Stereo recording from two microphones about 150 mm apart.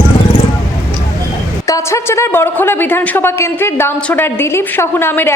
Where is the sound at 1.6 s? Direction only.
20° left (ahead or behind).